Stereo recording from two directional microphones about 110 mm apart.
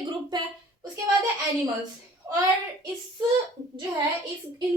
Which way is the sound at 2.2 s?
30° right (ahead or behind).